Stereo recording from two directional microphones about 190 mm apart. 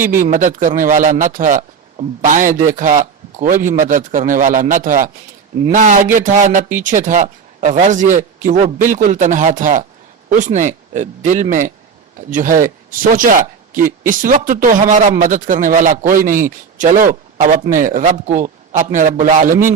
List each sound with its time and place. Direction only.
0.1 s a man's voice: 40° right (ahead or behind)